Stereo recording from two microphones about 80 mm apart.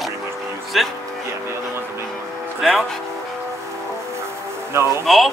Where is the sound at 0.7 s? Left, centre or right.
Centre.